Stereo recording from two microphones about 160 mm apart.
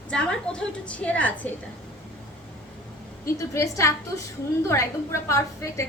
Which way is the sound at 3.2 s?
15° left (ahead or behind).